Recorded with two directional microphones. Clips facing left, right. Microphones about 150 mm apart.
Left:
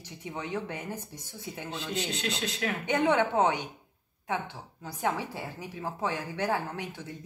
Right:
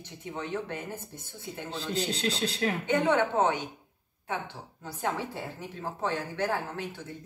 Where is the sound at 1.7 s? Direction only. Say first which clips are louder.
Right 2 dB; 35° right (ahead or behind).